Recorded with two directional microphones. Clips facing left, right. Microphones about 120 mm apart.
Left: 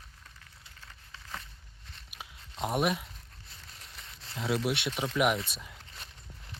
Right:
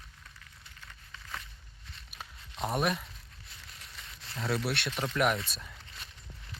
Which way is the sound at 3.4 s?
25° left (ahead or behind).